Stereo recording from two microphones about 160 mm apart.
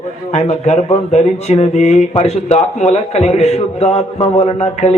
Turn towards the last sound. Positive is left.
turn(degrees=40)  # may be behind; listen again after turning